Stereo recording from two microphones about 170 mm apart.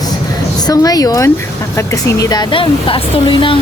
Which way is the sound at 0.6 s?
20° left (ahead or behind).